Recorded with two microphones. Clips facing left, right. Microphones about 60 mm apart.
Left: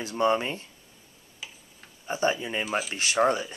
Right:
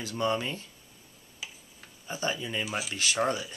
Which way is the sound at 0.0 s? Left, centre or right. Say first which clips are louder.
Left 5 dB; left.